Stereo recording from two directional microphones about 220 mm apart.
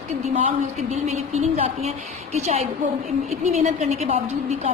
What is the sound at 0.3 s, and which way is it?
A woman's voice, 30° right (ahead or behind).